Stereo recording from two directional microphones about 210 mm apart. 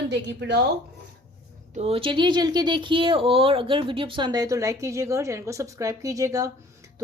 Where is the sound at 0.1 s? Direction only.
55° right (ahead or behind).